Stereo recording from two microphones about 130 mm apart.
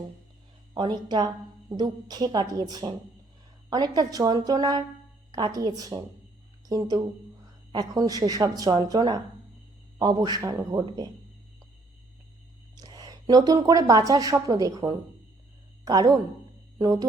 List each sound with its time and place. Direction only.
0.8 s a woman's voice: 35° right (ahead or behind)
12.7 s speech: 30° right (ahead or behind)